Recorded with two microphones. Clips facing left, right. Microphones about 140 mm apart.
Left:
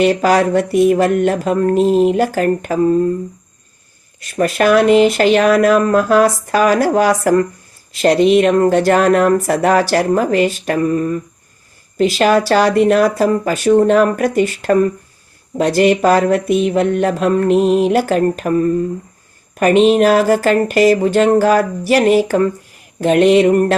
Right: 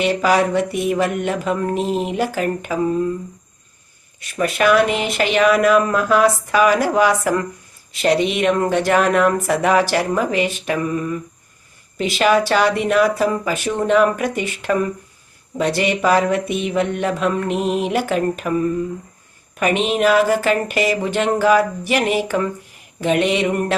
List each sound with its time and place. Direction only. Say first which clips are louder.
0.0 s speech: left 4 dB; 40° left (ahead or behind)
4.2 s speech: left 4 dB; 40° left (ahead or behind)